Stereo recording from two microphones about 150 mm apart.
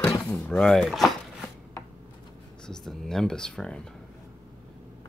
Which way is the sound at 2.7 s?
5° left (ahead or behind).